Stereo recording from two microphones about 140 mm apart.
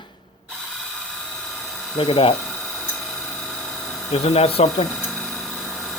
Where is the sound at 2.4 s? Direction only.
Centre (ahead or behind).